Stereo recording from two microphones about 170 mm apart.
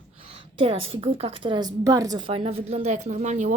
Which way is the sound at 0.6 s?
35° right (ahead or behind).